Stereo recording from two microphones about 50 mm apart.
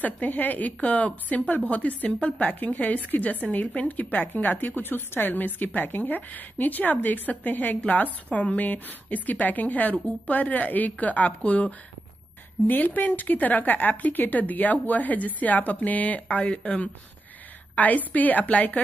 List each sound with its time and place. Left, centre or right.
0.0 s speech: left
2.0 s a woman's voice: left
2.4 s speech: left